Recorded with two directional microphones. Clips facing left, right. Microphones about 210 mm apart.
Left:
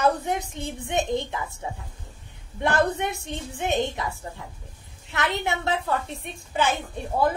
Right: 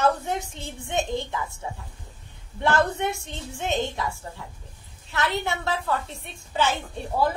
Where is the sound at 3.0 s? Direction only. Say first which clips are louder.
Even; 20° left (ahead or behind).